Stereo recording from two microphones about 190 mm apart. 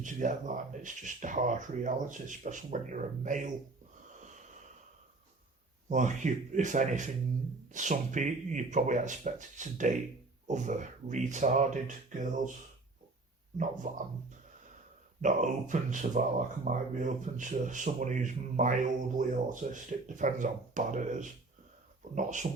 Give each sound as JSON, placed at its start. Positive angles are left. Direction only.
{"t": 0.0, "sound": "speech", "side_deg": -40}
{"t": 5.9, "sound": "speech", "side_deg": -40}
{"t": 13.8, "sound": "speech", "side_deg": -40}
{"t": 15.2, "sound": "speech", "side_deg": -40}